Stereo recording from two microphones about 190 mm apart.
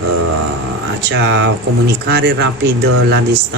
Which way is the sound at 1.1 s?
70° right (ahead or behind).